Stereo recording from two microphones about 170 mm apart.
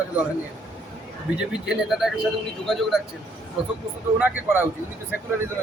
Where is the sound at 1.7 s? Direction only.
Centre (ahead or behind).